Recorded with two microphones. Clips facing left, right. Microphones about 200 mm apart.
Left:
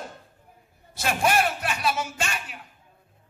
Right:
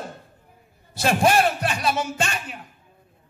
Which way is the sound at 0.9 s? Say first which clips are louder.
Right 4 dB; 35° right (ahead or behind).